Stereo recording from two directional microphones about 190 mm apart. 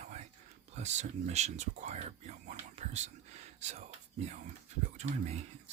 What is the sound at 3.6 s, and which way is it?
Whispering, 35° right (ahead or behind).